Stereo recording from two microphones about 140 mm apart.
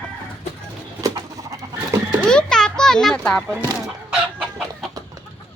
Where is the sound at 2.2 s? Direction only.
5° left (ahead or behind).